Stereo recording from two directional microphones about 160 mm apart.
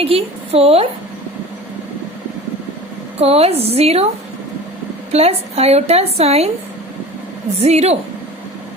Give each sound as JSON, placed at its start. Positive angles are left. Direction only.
{"t": 0.0, "sound": "a woman's voice", "side_deg": -35}
{"t": 3.2, "sound": "a woman's voice", "side_deg": -40}
{"t": 5.1, "sound": "a woman's voice", "side_deg": -40}
{"t": 7.6, "sound": "a woman's voice", "side_deg": -45}